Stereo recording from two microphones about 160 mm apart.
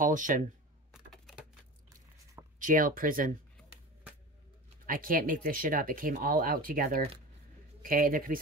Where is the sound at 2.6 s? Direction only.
60° right (ahead or behind).